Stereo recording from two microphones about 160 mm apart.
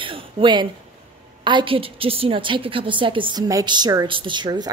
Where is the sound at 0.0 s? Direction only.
30° right (ahead or behind).